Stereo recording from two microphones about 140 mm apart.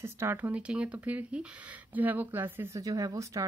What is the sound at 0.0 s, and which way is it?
Speech, 15° right (ahead or behind).